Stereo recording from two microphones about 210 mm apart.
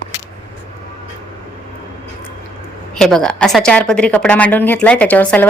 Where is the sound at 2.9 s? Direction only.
Centre (ahead or behind).